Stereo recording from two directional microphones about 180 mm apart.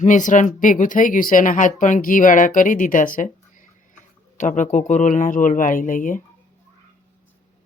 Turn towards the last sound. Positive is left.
turn(degrees=45)  # may be behind; listen again after turning